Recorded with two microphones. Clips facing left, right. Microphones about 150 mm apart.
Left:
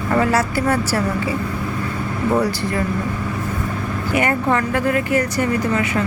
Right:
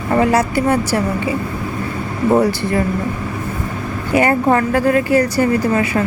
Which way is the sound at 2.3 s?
30° right (ahead or behind).